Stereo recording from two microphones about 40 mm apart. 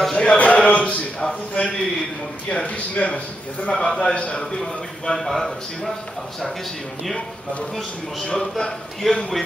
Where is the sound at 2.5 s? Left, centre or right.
Left.